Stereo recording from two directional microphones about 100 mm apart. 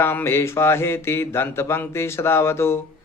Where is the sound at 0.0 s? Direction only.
20° left (ahead or behind).